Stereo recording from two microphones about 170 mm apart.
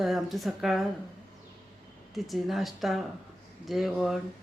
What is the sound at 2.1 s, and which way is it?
Speech, centre (ahead or behind).